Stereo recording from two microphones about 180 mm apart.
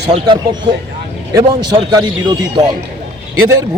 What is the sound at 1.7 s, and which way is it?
Speech, 25° right (ahead or behind).